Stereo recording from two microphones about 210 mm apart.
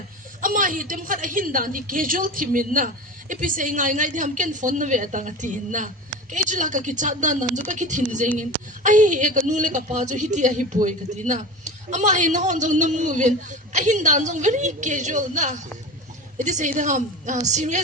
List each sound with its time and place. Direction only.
0.4 s a woman's voice: 40° right (ahead or behind)